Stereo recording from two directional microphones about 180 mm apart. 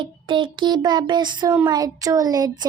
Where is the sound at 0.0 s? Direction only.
25° right (ahead or behind).